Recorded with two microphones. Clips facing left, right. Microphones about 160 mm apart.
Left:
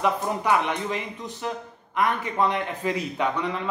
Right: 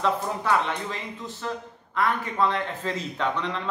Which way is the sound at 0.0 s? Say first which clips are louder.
Left 1 dB; 15° left (ahead or behind).